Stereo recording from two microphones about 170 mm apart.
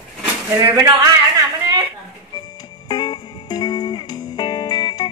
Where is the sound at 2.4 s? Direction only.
25° left (ahead or behind).